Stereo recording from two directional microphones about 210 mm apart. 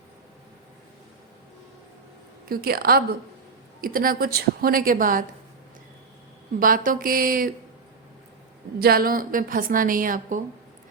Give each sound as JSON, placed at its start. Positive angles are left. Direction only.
{"t": 2.5, "sound": "a woman's voice", "side_deg": -45}
{"t": 6.6, "sound": "a woman's voice", "side_deg": -40}
{"t": 8.8, "sound": "a woman's voice", "side_deg": -45}